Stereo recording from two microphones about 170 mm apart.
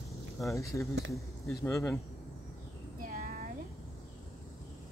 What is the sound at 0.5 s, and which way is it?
Speech, 15° left (ahead or behind).